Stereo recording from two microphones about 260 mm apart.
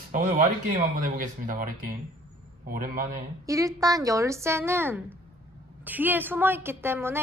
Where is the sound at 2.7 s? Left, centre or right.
Right.